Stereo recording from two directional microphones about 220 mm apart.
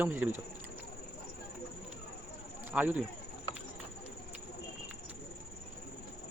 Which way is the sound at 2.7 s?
5° right (ahead or behind).